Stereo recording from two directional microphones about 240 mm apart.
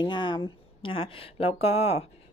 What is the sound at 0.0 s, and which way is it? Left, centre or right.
A woman's voice, centre.